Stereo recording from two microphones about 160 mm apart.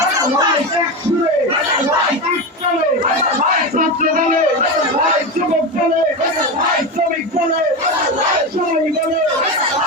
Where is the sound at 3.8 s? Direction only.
60° right (ahead or behind).